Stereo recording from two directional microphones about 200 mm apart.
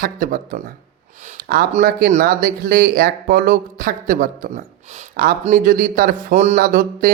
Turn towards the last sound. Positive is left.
turn(degrees=-45)  # may be behind; listen again after turning